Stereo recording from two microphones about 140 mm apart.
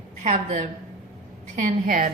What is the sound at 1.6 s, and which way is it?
Speech, 70° right (ahead or behind).